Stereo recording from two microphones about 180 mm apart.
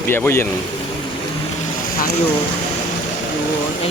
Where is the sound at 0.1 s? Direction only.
15° left (ahead or behind).